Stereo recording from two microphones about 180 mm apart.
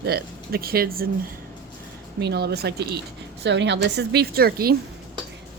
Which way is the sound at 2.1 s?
65° right (ahead or behind).